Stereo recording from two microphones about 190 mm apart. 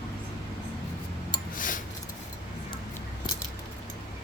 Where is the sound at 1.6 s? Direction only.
45° left (ahead or behind).